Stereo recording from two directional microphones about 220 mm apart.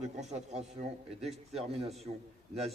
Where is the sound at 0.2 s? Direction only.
30° right (ahead or behind).